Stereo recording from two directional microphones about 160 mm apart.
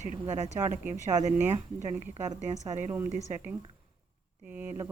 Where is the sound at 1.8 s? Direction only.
45° right (ahead or behind).